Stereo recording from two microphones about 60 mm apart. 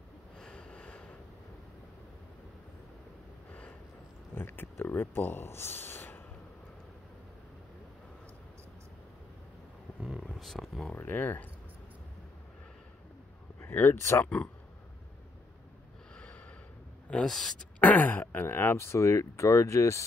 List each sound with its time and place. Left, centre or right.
0.4 s vehicle: centre
4.4 s speech: left
10.3 s a sound: centre
11.0 s speech: left
13.6 s a sound: left
13.9 s speech: left
14.2 s speech: left
17.1 s speech: centre
17.7 s speech: left